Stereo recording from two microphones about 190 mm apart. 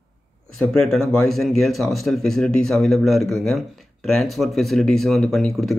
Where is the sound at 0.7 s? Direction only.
Centre (ahead or behind).